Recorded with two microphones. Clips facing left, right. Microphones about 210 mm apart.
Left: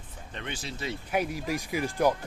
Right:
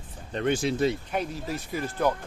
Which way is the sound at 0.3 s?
45° right (ahead or behind).